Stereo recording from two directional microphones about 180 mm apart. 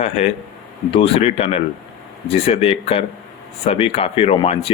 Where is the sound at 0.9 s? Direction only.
30° left (ahead or behind).